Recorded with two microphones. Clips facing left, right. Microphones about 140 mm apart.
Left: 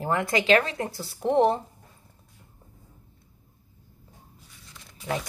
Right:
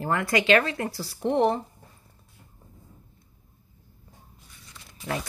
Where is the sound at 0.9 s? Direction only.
Centre (ahead or behind).